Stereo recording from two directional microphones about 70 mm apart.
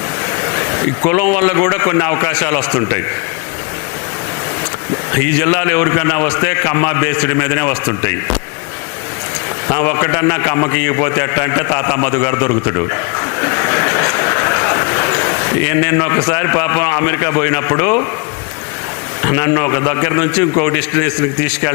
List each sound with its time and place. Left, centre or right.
0.4 s a man's voice: left
5.1 s a man's voice: left
9.6 s a man's voice: left
19.2 s a man's voice: left